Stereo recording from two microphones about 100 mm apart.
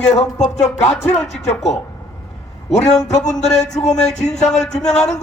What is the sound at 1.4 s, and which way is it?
Speech, 90° left.